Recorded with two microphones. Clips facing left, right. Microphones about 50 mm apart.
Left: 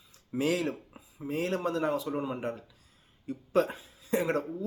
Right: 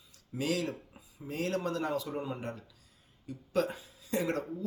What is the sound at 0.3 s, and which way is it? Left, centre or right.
Speech, left.